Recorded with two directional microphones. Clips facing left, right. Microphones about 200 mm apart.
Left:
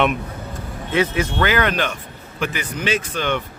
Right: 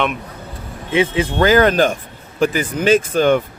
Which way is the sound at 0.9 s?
30° right (ahead or behind).